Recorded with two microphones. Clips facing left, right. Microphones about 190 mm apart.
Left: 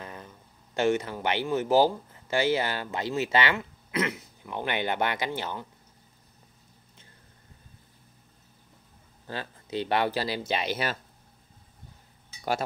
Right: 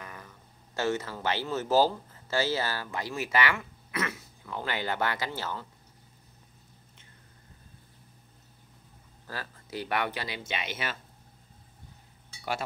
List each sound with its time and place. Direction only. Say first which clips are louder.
0.0 s a sound: left 4 dB; 25° left (ahead or behind)
0.7 s speech: left 5 dB; 15° left (ahead or behind)
9.3 s speech: left 5 dB; 25° left (ahead or behind)